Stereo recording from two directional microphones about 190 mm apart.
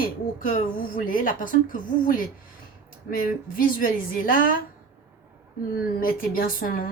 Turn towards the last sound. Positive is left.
turn(degrees=45)  # may be behind; listen again after turning